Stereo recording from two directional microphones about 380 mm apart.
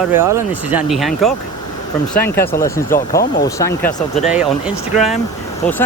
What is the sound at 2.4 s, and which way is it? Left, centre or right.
Speech, centre.